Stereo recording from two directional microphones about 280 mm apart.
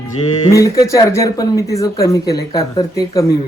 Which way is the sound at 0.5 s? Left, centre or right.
Centre.